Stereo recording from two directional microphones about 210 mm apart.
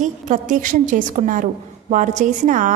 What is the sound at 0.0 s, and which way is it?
A woman's voice, 40° right (ahead or behind).